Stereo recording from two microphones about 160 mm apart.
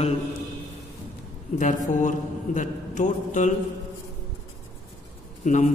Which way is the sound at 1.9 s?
50° left (ahead or behind).